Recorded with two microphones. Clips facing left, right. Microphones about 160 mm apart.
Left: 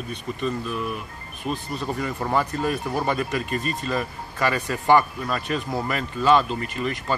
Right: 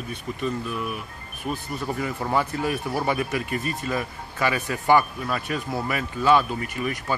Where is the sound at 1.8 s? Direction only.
5° right (ahead or behind).